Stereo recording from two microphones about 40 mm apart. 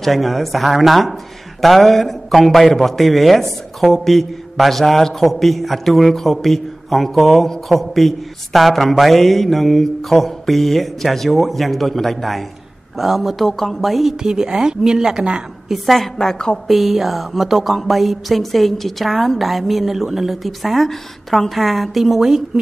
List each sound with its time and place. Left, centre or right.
0.0 s a woman's voice: centre
13.5 s a woman's voice: centre
14.2 s a woman's voice: centre
15.7 s a woman's voice: centre
16.6 s a woman's voice: centre